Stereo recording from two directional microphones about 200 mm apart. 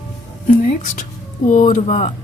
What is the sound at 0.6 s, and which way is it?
Speech, 35° left (ahead or behind).